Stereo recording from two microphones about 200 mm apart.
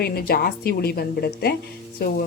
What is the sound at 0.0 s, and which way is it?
A woman's voice, 50° left (ahead or behind).